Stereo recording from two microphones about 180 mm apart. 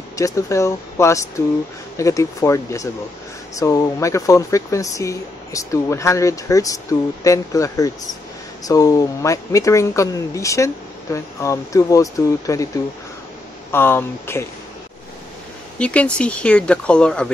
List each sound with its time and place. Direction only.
0.1 s speech: 15° left (ahead or behind)
13.7 s speech: 10° left (ahead or behind)
15.8 s speech: 5° left (ahead or behind)